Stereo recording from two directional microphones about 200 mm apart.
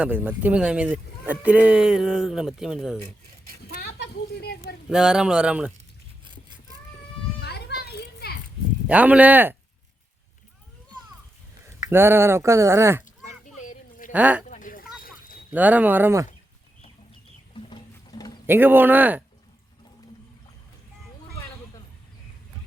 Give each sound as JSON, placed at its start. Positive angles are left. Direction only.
{"t": 0.0, "sound": "speech", "side_deg": -10}
{"t": 3.8, "sound": "speech", "side_deg": 55}
{"t": 4.9, "sound": "speech", "side_deg": -5}
{"t": 7.7, "sound": "children playing", "side_deg": 55}
{"t": 8.9, "sound": "speech", "side_deg": -5}
{"t": 11.9, "sound": "speech", "side_deg": -10}
{"t": 13.6, "sound": "a sound", "side_deg": 40}
{"t": 14.1, "sound": "speech", "side_deg": -5}
{"t": 14.4, "sound": "a sound", "side_deg": 40}
{"t": 15.5, "sound": "speech", "side_deg": -10}
{"t": 17.5, "sound": "a sound", "side_deg": 25}
{"t": 18.4, "sound": "speech", "side_deg": -10}